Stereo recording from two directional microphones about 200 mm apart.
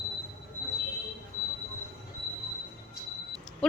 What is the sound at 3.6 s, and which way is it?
Speech, 5° left (ahead or behind).